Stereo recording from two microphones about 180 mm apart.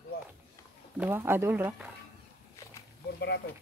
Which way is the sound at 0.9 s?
10° right (ahead or behind).